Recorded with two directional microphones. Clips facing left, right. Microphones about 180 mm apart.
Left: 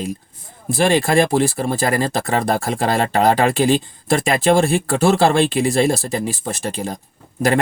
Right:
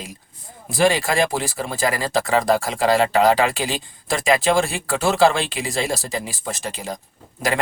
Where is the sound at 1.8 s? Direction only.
50° left (ahead or behind).